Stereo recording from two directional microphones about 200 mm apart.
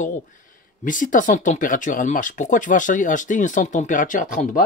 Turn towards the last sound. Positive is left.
turn(degrees=40)  # may be behind; listen again after turning